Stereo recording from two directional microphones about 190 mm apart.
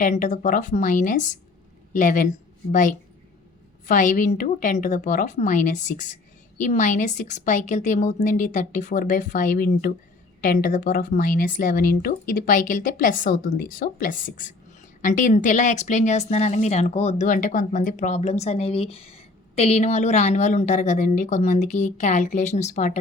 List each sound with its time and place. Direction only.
0.0 s speech: 40° left (ahead or behind)
3.8 s speech: 40° left (ahead or behind)